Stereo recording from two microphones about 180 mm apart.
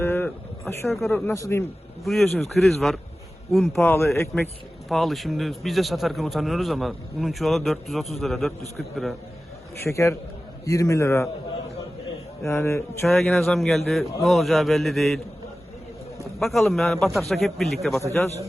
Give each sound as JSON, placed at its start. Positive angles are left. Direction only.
{"t": 0.0, "sound": "a sound", "side_deg": 10}
{"t": 0.7, "sound": "speech", "side_deg": 15}
{"t": 2.0, "sound": "a man's voice", "side_deg": 0}
{"t": 3.8, "sound": "a man's voice", "side_deg": 15}
{"t": 9.8, "sound": "speech", "side_deg": 15}
{"t": 12.5, "sound": "speech", "side_deg": 15}
{"t": 13.1, "sound": "a man's voice", "side_deg": 0}
{"t": 16.4, "sound": "a man's voice", "side_deg": 0}